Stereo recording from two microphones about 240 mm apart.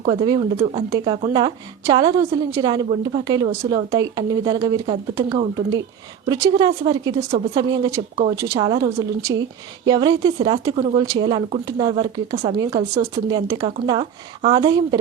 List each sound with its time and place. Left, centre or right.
0.0 s a woman's voice: centre